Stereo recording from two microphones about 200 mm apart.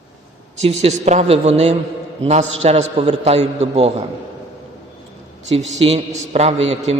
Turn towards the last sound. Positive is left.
turn(degrees=-35)  # may be behind; listen again after turning